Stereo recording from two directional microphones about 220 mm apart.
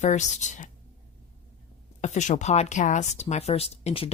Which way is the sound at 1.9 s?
30° left (ahead or behind).